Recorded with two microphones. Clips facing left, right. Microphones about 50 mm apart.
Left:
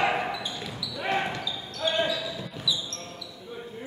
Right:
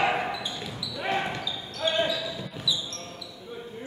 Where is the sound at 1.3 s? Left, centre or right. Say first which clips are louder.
Even; centre.